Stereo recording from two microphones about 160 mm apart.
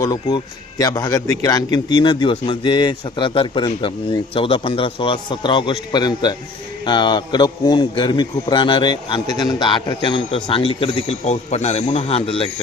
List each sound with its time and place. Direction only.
0.0 s a man's voice: 25° left (ahead or behind)